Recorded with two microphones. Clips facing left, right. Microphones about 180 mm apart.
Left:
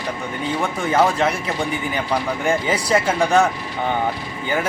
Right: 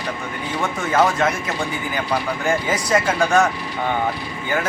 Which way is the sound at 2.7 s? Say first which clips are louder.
Left 1 dB; 30° left (ahead or behind).